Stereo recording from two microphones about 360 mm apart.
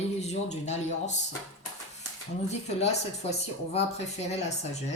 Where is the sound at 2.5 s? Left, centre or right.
Centre.